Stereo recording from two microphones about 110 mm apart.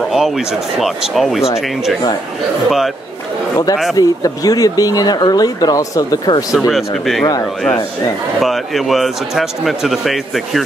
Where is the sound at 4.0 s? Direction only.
35° left (ahead or behind).